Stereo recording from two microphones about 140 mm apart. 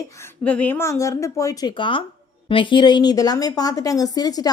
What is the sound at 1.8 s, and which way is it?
A woman's voice, 35° left (ahead or behind).